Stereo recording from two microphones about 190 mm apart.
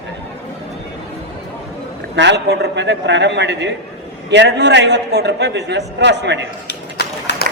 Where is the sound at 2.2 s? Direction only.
65° right (ahead or behind).